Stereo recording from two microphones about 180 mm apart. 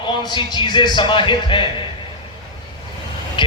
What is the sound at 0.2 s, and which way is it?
A man's voice, 25° left (ahead or behind).